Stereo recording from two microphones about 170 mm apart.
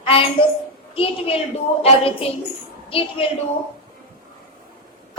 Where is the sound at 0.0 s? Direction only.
30° left (ahead or behind).